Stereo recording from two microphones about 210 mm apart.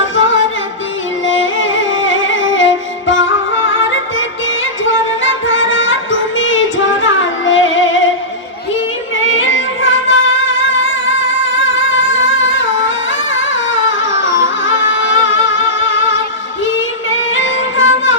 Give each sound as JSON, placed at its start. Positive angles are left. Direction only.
{"t": 0.2, "sound": "music", "side_deg": 65}
{"t": 4.9, "sound": "music", "side_deg": 65}
{"t": 9.1, "sound": "music", "side_deg": 65}
{"t": 11.5, "sound": "music", "side_deg": 65}